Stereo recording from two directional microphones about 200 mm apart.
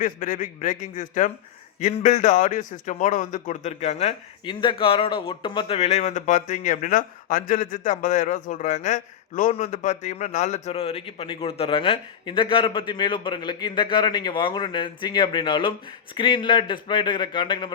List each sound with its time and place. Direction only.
0.0 s a man's voice: 40° left (ahead or behind); by 17.7 s 25° left (ahead or behind)